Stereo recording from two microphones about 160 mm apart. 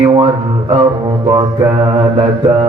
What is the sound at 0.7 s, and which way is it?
Mantra, 35° right (ahead or behind).